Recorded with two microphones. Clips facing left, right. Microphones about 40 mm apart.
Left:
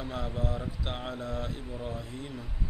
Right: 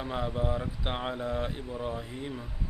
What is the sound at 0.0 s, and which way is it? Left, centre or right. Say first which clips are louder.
Speech: right 3 dB; right.